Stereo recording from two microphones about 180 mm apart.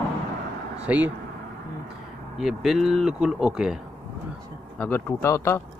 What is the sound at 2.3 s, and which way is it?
Speech, centre (ahead or behind).